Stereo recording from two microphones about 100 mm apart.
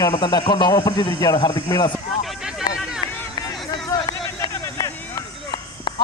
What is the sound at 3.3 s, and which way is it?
Run, 45° left (ahead or behind).